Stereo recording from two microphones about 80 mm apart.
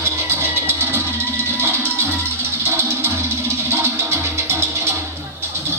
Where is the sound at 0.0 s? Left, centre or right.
Right.